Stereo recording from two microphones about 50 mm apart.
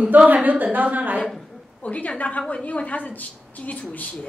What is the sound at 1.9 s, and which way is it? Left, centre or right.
A woman's voice, left.